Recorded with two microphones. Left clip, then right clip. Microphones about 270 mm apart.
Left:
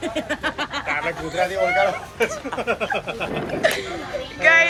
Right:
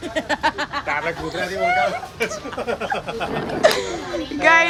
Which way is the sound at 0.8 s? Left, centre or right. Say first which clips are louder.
Right 1 dB; right.